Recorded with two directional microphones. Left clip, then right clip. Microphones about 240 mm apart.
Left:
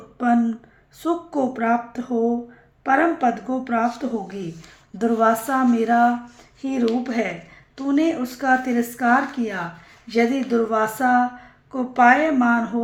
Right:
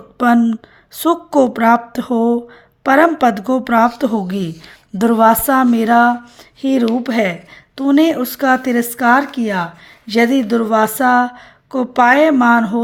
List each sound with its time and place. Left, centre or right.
0.2 s a woman's voice: right